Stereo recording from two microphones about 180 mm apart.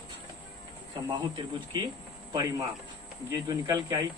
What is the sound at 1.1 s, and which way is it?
Speech, 25° right (ahead or behind).